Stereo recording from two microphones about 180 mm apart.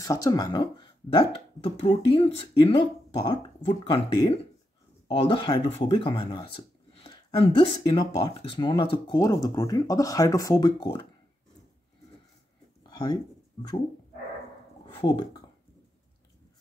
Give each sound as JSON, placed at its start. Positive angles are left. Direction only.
{"t": 0.0, "sound": "speech", "side_deg": 20}
{"t": 15.0, "sound": "speech", "side_deg": 25}